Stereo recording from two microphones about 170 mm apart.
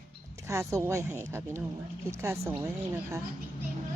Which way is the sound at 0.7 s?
15° right (ahead or behind).